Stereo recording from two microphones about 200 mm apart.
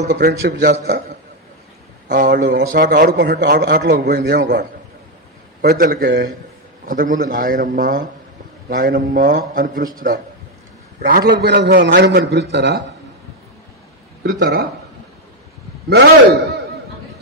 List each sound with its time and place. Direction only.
0.1 s a man's voice: 55° right (ahead or behind)
2.1 s a man's voice: 55° right (ahead or behind)
14.4 s a man's voice: 50° right (ahead or behind)
15.9 s a man's voice: 60° right (ahead or behind)